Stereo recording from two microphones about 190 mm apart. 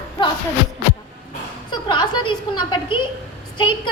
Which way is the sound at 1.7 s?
25° left (ahead or behind).